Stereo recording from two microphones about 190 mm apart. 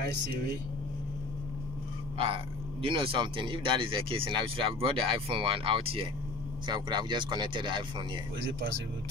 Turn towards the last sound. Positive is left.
turn(degrees=-25)  # may be behind; listen again after turning